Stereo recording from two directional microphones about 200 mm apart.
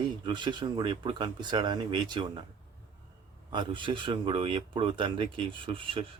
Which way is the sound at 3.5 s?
25° right (ahead or behind).